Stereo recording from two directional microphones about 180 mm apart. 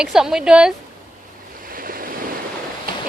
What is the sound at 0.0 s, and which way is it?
Speech, 5° right (ahead or behind).